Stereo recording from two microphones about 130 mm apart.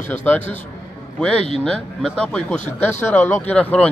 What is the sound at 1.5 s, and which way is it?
Speech, 5° left (ahead or behind).